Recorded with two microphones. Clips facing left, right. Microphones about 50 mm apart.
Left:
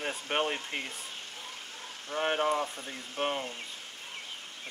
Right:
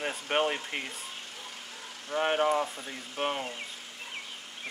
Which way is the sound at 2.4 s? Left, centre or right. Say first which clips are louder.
Right 2 dB; right.